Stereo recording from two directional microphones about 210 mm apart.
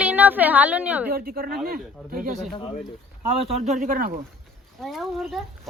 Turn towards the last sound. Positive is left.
turn(degrees=0)  # may be behind; listen again after turning